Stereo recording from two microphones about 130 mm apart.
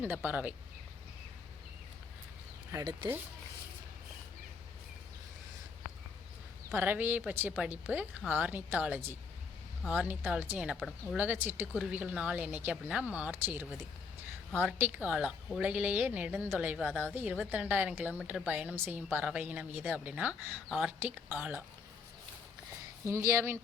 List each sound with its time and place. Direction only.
0.0 s a woman's voice: 15° right (ahead or behind)
2.7 s speech: 30° right (ahead or behind)
6.7 s a woman's voice: 15° right (ahead or behind)
10.8 s speech: 5° left (ahead or behind)
11.2 s a woman's voice: 15° right (ahead or behind)
16.8 s speech: 5° left (ahead or behind)
17.2 s a woman's voice: 10° right (ahead or behind)
23.0 s speech: 20° right (ahead or behind)